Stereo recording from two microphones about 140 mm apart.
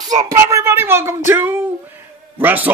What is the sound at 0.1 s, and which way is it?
Speech, 25° right (ahead or behind).